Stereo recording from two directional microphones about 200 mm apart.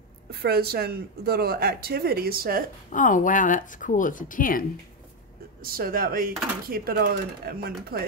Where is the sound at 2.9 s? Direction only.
40° left (ahead or behind).